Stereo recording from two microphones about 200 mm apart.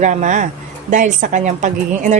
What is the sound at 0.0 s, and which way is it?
A woman's voice, 40° right (ahead or behind).